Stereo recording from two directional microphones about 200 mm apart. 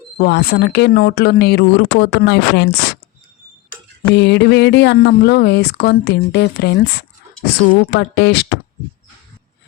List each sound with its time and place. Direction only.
0.2 s speech: 55° left (ahead or behind)
4.1 s speech: 60° left (ahead or behind)